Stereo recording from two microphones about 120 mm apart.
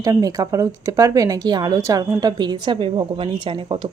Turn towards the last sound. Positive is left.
turn(degrees=-40)  # may be behind; listen again after turning